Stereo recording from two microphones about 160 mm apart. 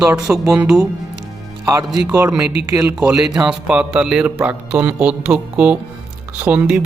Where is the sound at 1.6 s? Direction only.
25° right (ahead or behind).